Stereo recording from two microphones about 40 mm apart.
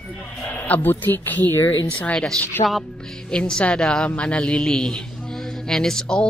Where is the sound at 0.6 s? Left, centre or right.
Left.